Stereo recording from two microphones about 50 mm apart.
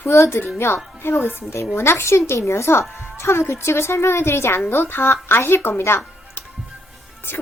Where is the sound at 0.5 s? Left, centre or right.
Left.